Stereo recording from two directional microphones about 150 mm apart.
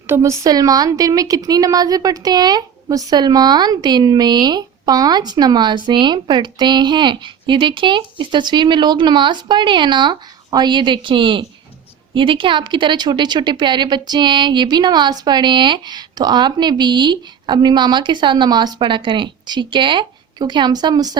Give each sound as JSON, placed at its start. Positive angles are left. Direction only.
{"t": 0.1, "sound": "a woman's voice", "side_deg": -20}